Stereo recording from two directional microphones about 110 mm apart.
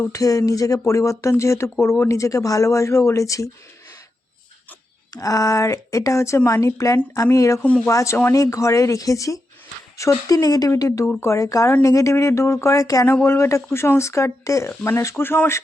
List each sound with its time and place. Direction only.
0.1 s a woman's voice: 30° left (ahead or behind)
5.1 s a woman's voice: 30° left (ahead or behind)
11.0 s speech: 15° left (ahead or behind)
11.3 s a woman's voice: 30° left (ahead or behind)